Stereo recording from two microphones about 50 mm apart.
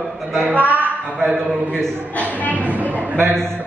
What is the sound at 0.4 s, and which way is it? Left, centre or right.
Speech, right.